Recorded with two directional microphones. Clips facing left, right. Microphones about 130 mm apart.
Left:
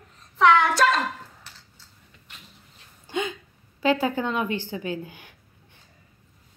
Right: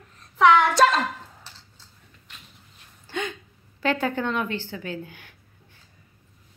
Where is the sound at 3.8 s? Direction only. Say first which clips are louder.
Left 2 dB; 10° left (ahead or behind).